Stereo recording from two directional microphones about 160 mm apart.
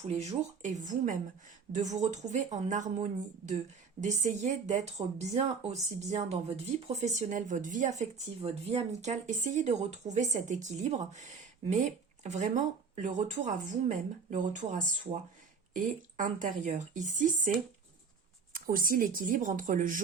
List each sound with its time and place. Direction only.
0.1 s a woman's voice: 45° right (ahead or behind)